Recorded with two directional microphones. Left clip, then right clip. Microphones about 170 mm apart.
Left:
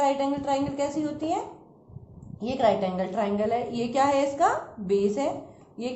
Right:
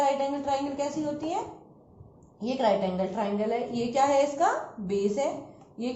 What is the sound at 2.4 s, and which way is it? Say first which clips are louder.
A woman's voice: left 2 dB; 40° left (ahead or behind).